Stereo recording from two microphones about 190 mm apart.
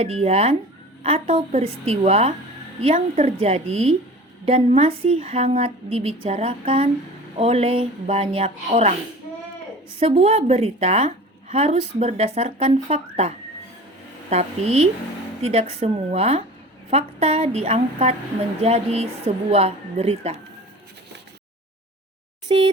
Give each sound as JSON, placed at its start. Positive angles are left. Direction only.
{"t": 0.0, "sound": "a woman's voice", "side_deg": -30}
{"t": 10.0, "sound": "a woman's voice", "side_deg": -30}
{"t": 22.4, "sound": "speech", "side_deg": -25}